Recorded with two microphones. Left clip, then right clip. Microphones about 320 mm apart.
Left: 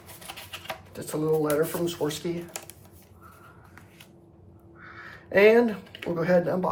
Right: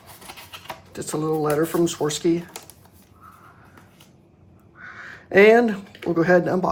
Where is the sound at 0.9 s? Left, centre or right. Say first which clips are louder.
Right 2 dB; right.